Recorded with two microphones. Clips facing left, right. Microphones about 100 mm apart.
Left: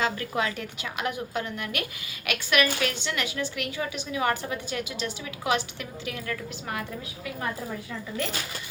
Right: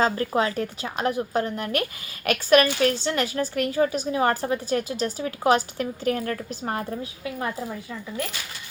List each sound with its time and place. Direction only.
0.0 s a woman's voice: 35° right (ahead or behind)